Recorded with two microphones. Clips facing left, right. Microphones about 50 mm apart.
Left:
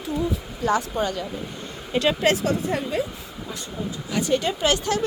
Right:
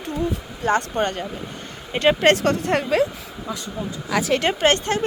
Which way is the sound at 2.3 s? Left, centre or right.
Right.